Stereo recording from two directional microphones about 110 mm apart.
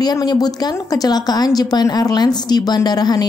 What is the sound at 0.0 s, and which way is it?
Speech, 40° left (ahead or behind).